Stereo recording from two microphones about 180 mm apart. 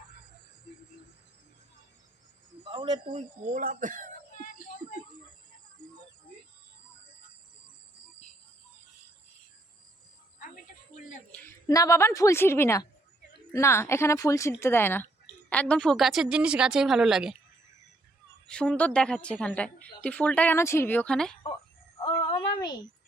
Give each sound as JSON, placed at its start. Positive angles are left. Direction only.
{"t": 2.6, "sound": "speech", "side_deg": -30}
{"t": 11.3, "sound": "a sound", "side_deg": 10}
{"t": 11.7, "sound": "a woman's voice", "side_deg": 15}
{"t": 18.4, "sound": "a woman's voice", "side_deg": 5}
{"t": 22.5, "sound": "a woman's voice", "side_deg": 25}